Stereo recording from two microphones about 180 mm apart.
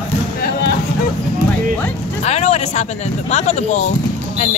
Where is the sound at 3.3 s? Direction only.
40° left (ahead or behind).